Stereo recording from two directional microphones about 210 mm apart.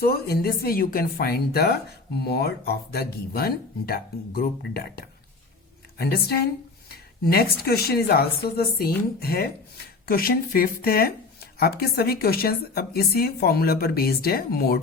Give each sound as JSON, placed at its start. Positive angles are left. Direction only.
{"t": 0.0, "sound": "speech", "side_deg": 50}